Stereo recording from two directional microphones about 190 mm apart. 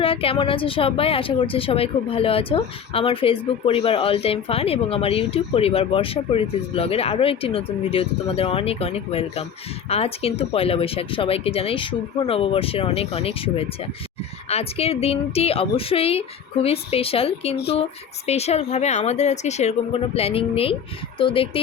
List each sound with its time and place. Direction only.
0.0 s a woman's voice: 30° left (ahead or behind)